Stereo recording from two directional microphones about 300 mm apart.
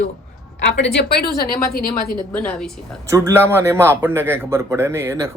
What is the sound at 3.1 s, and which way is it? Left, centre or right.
A man's voice, centre.